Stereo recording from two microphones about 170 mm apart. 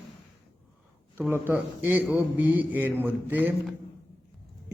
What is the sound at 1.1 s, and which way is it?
A man's voice, 10° right (ahead or behind).